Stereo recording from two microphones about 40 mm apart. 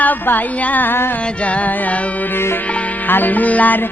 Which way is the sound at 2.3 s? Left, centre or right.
Left.